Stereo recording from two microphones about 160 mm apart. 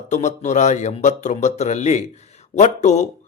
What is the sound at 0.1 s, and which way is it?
A man's voice, 45° left (ahead or behind).